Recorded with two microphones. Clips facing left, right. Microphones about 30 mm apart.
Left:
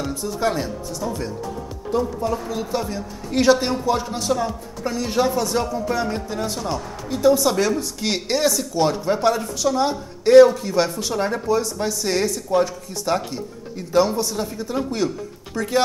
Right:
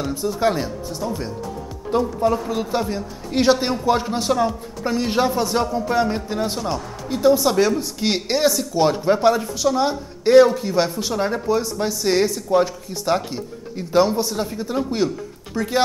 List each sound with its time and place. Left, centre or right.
0.1 s speech: centre
1.9 s speech: centre
3.8 s speech: right